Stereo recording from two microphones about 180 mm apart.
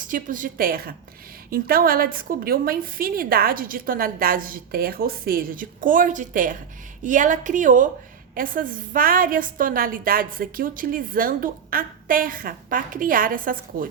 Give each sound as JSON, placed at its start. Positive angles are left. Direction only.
{"t": 0.0, "sound": "a woman's voice", "side_deg": -50}